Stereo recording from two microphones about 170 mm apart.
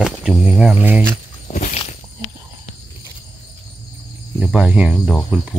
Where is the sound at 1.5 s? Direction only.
45° left (ahead or behind).